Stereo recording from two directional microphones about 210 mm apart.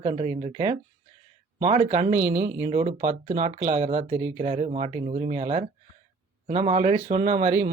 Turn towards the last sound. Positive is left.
turn(degrees=-35)  # may be behind; listen again after turning